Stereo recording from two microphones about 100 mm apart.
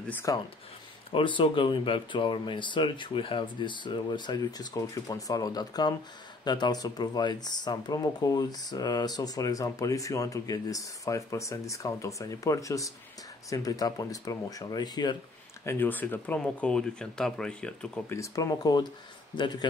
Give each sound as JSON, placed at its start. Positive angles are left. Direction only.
{"t": 0.3, "sound": "speech", "side_deg": 35}
{"t": 1.1, "sound": "speech", "side_deg": 55}
{"t": 15.6, "sound": "speech", "side_deg": 20}
{"t": 18.0, "sound": "speech", "side_deg": 30}